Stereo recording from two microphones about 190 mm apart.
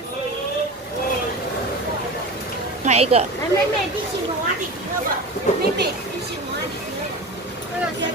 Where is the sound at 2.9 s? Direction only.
35° right (ahead or behind).